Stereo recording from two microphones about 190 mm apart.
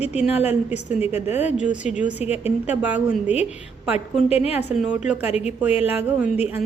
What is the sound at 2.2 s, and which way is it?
Speech, 35° left (ahead or behind).